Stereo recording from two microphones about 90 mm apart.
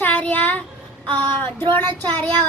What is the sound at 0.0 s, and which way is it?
Child singing, 15° left (ahead or behind).